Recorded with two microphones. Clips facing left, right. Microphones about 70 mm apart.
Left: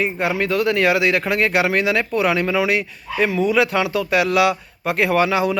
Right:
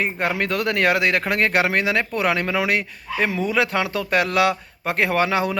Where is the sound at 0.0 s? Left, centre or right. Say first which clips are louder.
Left 2 dB; right.